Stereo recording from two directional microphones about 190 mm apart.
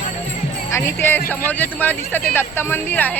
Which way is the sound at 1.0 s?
10° left (ahead or behind).